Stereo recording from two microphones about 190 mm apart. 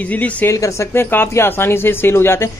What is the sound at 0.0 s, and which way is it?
Speech, 10° left (ahead or behind).